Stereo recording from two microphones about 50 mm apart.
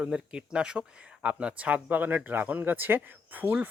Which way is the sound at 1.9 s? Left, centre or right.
Right.